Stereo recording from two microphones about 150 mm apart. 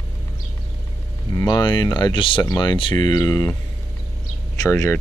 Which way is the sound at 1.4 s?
25° left (ahead or behind).